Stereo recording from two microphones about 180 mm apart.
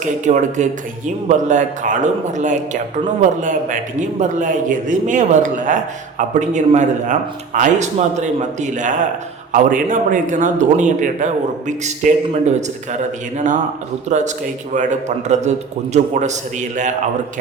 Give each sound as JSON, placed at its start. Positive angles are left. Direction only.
{"t": 0.0, "sound": "speech", "side_deg": -40}